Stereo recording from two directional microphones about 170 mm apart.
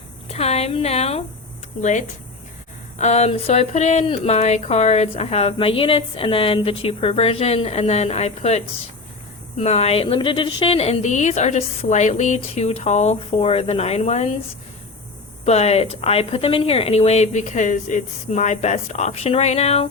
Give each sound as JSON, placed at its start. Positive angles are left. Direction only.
{"t": 0.3, "sound": "a woman's voice", "side_deg": 40}
{"t": 15.4, "sound": "speech", "side_deg": 40}